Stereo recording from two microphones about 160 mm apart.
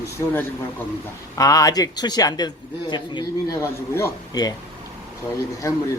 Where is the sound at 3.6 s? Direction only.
15° left (ahead or behind).